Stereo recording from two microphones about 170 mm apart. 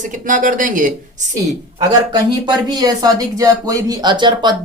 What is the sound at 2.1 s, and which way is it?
Speech, 25° right (ahead or behind).